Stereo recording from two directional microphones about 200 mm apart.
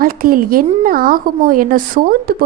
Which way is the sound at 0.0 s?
45° right (ahead or behind).